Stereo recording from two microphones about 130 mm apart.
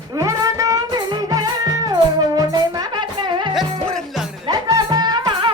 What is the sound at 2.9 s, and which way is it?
Music, 40° right (ahead or behind).